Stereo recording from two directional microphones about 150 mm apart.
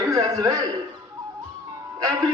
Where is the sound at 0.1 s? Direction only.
25° right (ahead or behind).